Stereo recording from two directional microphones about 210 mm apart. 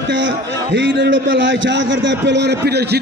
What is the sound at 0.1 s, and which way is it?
A man's voice, 60° right (ahead or behind).